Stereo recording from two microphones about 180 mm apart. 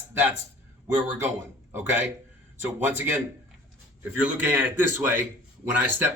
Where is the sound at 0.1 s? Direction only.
10° right (ahead or behind).